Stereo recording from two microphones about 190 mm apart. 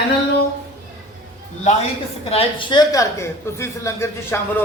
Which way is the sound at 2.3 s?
30° left (ahead or behind).